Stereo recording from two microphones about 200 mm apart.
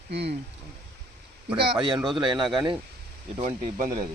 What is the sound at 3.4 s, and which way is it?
Speech, 40° right (ahead or behind).